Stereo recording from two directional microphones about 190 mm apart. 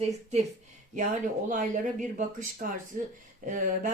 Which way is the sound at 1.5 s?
40° right (ahead or behind).